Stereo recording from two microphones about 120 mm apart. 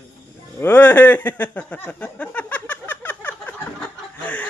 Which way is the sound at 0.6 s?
15° left (ahead or behind).